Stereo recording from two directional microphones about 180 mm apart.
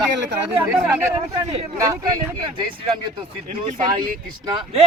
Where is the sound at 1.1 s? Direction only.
30° right (ahead or behind).